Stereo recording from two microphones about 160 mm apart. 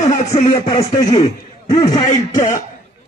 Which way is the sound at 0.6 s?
25° left (ahead or behind).